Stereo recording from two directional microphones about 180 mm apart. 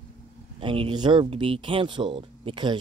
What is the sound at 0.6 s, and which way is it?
Speech, 30° right (ahead or behind).